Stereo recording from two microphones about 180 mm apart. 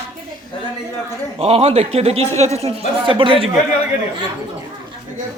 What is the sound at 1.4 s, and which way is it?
Speech, 35° right (ahead or behind).